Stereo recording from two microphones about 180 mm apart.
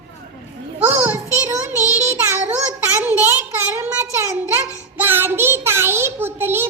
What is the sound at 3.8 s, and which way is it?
Child singing, 15° right (ahead or behind).